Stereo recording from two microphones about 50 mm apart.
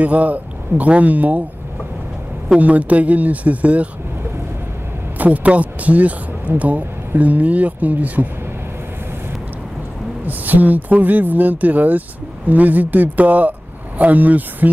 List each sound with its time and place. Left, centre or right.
0.0 s speech: right
2.6 s speech: right
5.2 s speech: right
10.2 s speech: right